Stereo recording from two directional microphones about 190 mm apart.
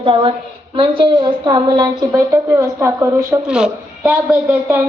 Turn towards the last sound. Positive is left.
turn(degrees=-10)  # may be behind; listen again after turning